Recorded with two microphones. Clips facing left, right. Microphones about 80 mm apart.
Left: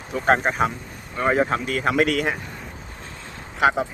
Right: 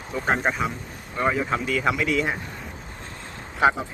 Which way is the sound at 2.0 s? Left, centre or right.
Left.